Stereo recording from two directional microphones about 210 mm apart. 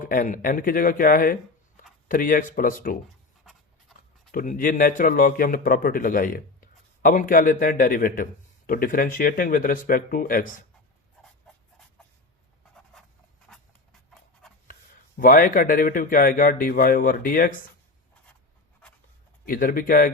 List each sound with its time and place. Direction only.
0.0 s a man's voice: 40° left (ahead or behind)
4.3 s a man's voice: 40° left (ahead or behind)
11.5 s dog: 5° left (ahead or behind)
12.7 s writing: centre (ahead or behind)
13.5 s a sound: 5° left (ahead or behind)
14.7 s a man's voice: 40° left (ahead or behind)
19.5 s a man's voice: 40° left (ahead or behind)